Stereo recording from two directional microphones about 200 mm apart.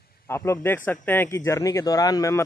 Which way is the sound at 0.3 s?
10° left (ahead or behind).